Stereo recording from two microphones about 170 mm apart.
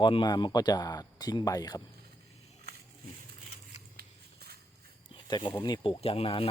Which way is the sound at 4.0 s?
65° right (ahead or behind).